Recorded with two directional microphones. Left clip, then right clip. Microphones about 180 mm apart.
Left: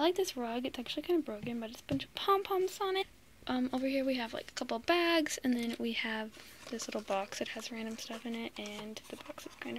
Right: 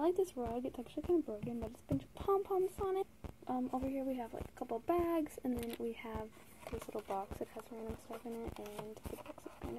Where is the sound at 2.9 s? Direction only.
15° left (ahead or behind); by 7.4 s 35° left (ahead or behind).